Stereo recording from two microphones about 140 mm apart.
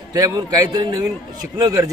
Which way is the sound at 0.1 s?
25° right (ahead or behind).